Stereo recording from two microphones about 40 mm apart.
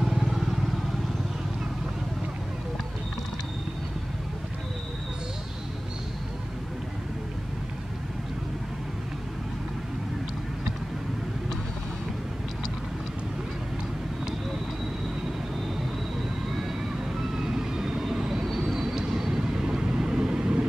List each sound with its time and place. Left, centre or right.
0.0 s vehicle: centre
16.5 s vehicle: centre